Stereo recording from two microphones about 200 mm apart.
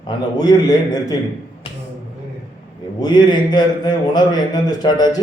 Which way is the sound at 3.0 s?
20° left (ahead or behind).